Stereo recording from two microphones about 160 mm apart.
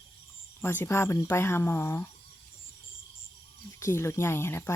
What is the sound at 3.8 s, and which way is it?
Speech, 15° left (ahead or behind).